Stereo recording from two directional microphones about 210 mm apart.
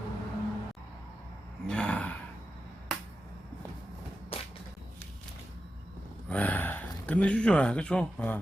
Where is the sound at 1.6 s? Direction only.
5° left (ahead or behind).